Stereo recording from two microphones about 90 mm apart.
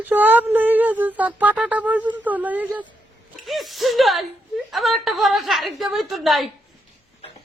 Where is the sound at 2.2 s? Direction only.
20° right (ahead or behind).